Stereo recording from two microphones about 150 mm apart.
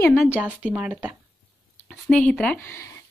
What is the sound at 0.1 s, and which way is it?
A woman's voice, 5° right (ahead or behind).